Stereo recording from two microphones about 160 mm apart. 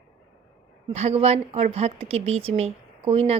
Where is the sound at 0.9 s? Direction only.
40° right (ahead or behind).